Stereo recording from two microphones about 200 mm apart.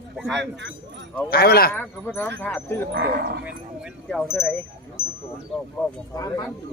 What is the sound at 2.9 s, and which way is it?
Speech, 55° right (ahead or behind).